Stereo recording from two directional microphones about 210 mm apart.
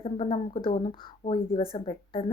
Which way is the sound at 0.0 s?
25° left (ahead or behind).